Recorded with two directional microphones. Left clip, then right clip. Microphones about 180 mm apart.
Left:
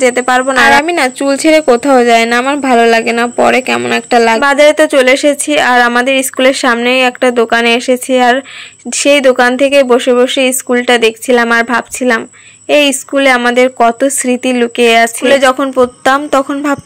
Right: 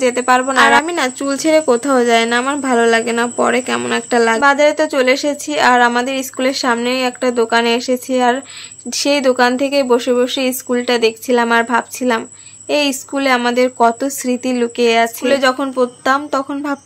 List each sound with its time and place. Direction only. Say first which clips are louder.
0.0 s speech: left 4 dB; 25° left (ahead or behind)